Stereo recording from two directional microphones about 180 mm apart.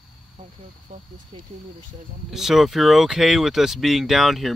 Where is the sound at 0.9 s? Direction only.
45° right (ahead or behind).